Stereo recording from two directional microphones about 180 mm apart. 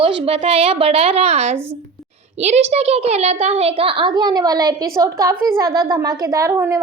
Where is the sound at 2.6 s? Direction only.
35° right (ahead or behind).